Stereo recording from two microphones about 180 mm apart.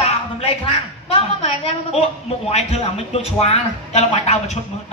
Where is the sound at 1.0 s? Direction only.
35° left (ahead or behind).